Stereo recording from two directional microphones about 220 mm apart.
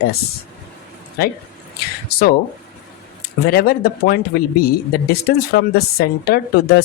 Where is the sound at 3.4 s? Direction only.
45° left (ahead or behind).